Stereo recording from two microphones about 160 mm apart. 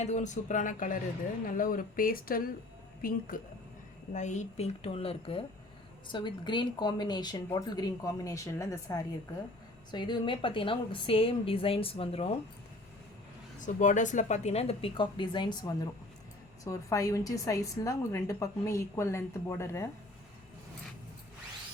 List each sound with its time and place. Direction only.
0.0 s speech: 45° left (ahead or behind)
4.1 s a woman's voice: 50° left (ahead or behind)
13.6 s a woman's voice: 50° left (ahead or behind); by 19.9 s 15° left (ahead or behind)